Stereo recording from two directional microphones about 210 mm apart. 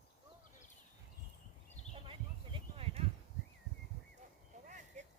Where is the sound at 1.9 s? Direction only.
25° right (ahead or behind).